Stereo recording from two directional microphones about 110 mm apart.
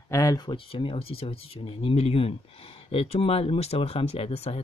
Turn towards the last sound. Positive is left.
turn(degrees=60)  # may be behind; listen again after turning